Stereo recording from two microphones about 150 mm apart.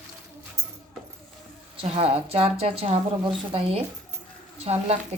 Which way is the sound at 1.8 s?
40° right (ahead or behind).